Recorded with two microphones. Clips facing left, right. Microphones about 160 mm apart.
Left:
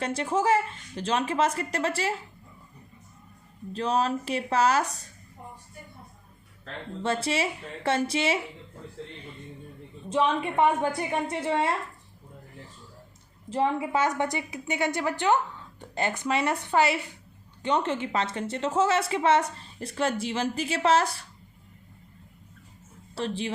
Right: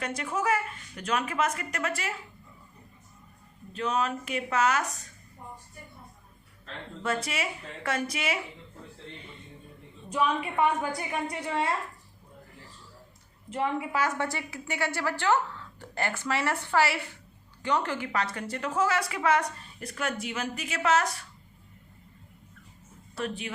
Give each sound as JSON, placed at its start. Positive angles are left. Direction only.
{"t": 0.0, "sound": "a woman's voice", "side_deg": 30}
{"t": 3.7, "sound": "speech", "side_deg": 35}
{"t": 7.0, "sound": "a woman's voice", "side_deg": 30}
{"t": 10.1, "sound": "a woman's voice", "side_deg": 25}
{"t": 13.5, "sound": "a woman's voice", "side_deg": 30}
{"t": 23.1, "sound": "speech", "side_deg": 30}